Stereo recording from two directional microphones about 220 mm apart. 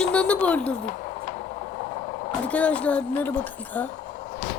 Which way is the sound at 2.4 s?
5° left (ahead or behind).